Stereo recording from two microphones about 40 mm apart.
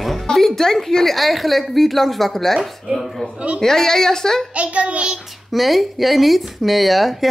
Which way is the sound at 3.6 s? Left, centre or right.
Centre.